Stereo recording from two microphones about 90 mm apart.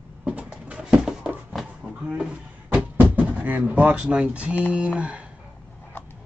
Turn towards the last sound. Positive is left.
turn(degrees=-15)  # may be behind; listen again after turning